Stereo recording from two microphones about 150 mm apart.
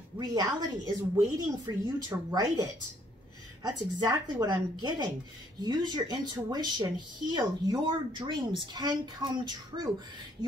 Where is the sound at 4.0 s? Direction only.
25° right (ahead or behind).